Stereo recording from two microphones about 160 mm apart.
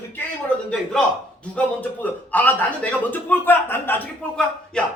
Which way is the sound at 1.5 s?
10° left (ahead or behind).